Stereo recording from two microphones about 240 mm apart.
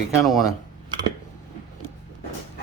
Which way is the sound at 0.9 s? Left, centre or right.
Centre.